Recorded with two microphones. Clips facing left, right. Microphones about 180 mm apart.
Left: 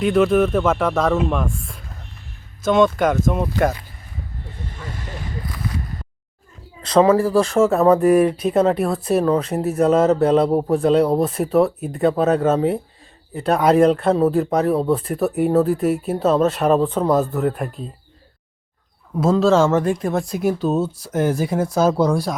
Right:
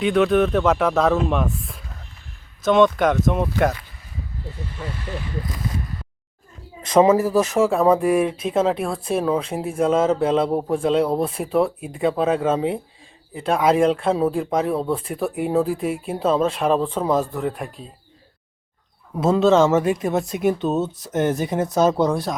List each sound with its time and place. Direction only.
0.0 s speech: centre (ahead or behind)
6.8 s speech: 20° right (ahead or behind)
7.2 s speech: 10° right (ahead or behind)
19.1 s speech: 5° right (ahead or behind)